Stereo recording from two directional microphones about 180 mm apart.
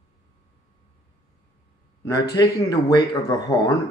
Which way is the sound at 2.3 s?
20° left (ahead or behind).